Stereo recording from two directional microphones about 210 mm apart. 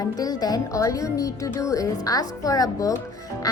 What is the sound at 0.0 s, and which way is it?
Speech, 15° left (ahead or behind).